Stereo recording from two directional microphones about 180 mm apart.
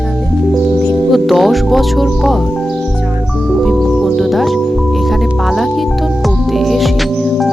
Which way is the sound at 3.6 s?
Centre (ahead or behind).